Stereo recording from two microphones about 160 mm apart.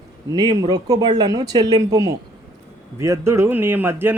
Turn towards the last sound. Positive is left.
turn(degrees=-15)  # may be behind; listen again after turning